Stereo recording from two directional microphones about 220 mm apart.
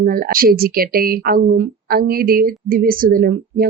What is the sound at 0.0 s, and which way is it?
Speech, 40° right (ahead or behind).